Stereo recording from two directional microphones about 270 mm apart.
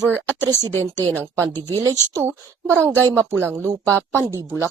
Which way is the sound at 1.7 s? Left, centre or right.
Centre.